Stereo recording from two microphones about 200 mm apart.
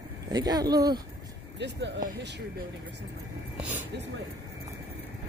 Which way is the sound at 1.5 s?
60° right (ahead or behind).